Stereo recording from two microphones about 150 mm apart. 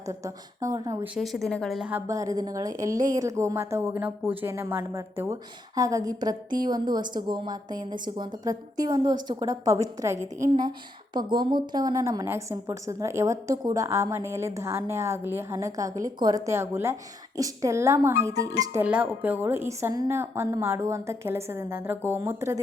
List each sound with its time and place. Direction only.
0.6 s a woman's voice: 25° right (ahead or behind)
1.0 s a woman's voice: 5° right (ahead or behind); by 10.2 s 20° right (ahead or behind)
10.2 s a woman's voice: 50° right (ahead or behind)
10.6 s a woman's voice: 30° right (ahead or behind)
18.7 s a woman's voice: 10° right (ahead or behind)